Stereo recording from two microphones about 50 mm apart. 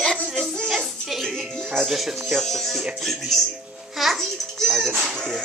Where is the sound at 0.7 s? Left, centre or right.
Centre.